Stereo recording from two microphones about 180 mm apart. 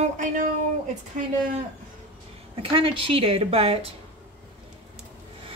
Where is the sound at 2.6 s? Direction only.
30° right (ahead or behind).